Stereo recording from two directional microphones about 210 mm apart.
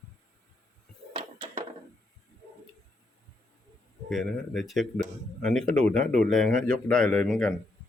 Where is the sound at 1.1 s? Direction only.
25° right (ahead or behind).